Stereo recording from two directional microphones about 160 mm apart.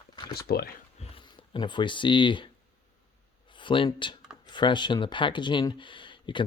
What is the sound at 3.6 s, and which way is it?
Speech, 30° left (ahead or behind).